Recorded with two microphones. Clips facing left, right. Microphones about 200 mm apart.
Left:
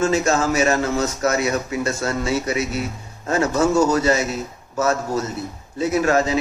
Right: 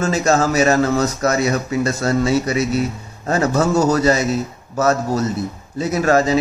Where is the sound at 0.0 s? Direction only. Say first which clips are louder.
Right 2 dB; 40° right (ahead or behind).